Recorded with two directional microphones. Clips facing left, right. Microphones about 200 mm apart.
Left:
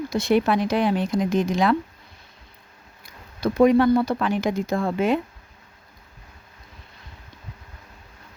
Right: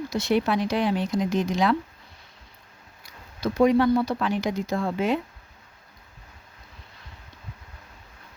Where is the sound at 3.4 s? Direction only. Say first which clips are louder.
Left 3 dB; 55° left (ahead or behind).